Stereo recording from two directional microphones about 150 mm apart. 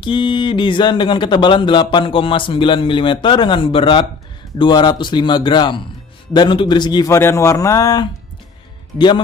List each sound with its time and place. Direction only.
0.0 s speech: 35° left (ahead or behind)